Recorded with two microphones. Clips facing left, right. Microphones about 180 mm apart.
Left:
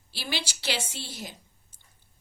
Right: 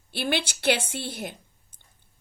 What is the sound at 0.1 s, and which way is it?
A woman's voice, 55° right (ahead or behind).